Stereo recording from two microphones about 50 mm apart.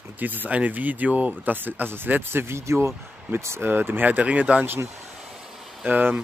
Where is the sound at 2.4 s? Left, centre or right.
Right.